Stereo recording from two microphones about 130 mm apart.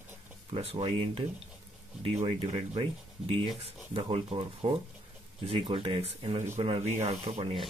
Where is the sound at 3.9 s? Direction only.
45° right (ahead or behind).